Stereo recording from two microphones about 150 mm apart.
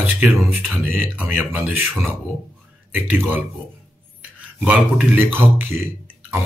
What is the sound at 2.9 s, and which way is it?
Speech, 10° right (ahead or behind).